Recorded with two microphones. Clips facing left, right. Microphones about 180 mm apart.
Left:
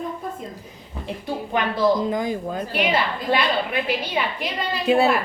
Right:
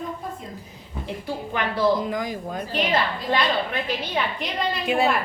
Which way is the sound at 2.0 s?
25° left (ahead or behind).